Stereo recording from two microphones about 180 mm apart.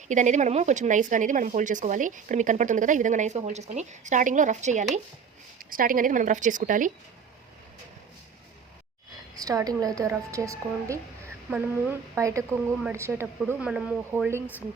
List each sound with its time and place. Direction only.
0.1 s speech: 45° right (ahead or behind)
9.3 s a woman's voice: 20° right (ahead or behind)
10.8 s a sound: 15° right (ahead or behind)
11.5 s speech: 10° right (ahead or behind)